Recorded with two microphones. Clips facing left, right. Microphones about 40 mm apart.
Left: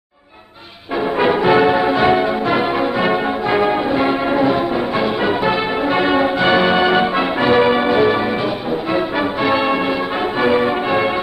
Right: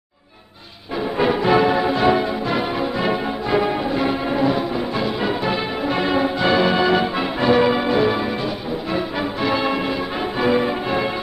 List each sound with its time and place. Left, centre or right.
1.2 s music: left